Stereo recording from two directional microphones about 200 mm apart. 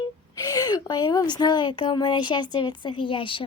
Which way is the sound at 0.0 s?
20° left (ahead or behind).